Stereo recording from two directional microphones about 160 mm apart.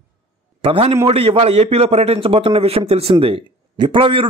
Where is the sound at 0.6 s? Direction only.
40° right (ahead or behind).